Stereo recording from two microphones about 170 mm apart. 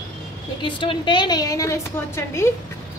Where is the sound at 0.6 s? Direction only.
30° left (ahead or behind).